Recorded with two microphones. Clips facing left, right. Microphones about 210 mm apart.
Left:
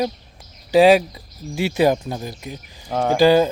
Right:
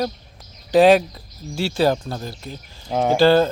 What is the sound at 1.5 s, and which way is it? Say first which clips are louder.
Speech: left 2 dB; 15° left (ahead or behind).